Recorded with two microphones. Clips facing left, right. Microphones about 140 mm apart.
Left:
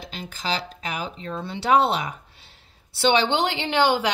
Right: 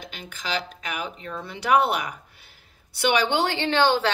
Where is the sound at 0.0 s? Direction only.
35° left (ahead or behind).